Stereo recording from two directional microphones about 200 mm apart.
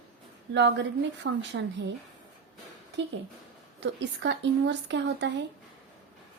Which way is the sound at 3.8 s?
60° right (ahead or behind).